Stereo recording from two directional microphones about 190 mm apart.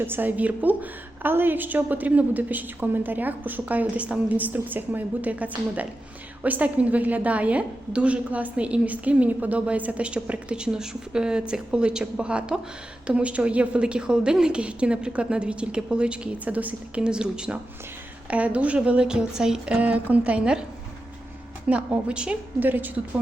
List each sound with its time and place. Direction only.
0.0 s a woman's voice: 10° right (ahead or behind)
21.7 s a woman's voice: 5° right (ahead or behind)